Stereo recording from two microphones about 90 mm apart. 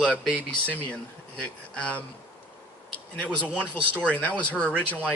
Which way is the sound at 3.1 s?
15° left (ahead or behind).